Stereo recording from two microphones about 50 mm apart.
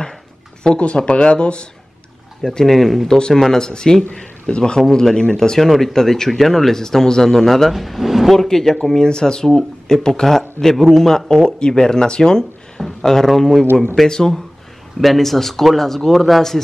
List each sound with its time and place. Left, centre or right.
0.7 s speech: left
2.4 s speech: centre
3.1 s speech: centre